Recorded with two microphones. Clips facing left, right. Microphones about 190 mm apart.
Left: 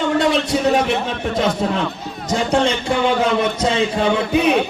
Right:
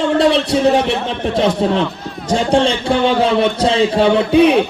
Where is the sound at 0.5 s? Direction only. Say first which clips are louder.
Right 3 dB; 30° right (ahead or behind).